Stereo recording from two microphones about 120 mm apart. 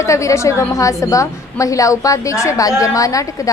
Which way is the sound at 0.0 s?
25° left (ahead or behind).